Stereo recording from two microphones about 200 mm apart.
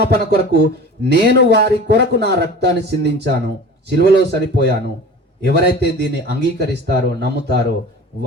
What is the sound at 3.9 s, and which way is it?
Speech, 55° right (ahead or behind).